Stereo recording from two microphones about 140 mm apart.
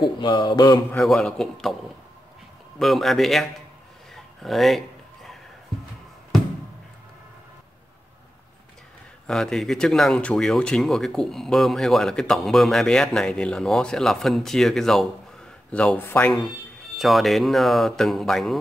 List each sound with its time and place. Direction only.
0.0 s mantra: 30° left (ahead or behind)
0.9 s speech: 5° left (ahead or behind)
2.8 s speech: centre (ahead or behind)
4.1 s a sound: centre (ahead or behind)
9.3 s speech: 5° left (ahead or behind)
16.0 s speech: 15° left (ahead or behind)
16.9 s speech: centre (ahead or behind)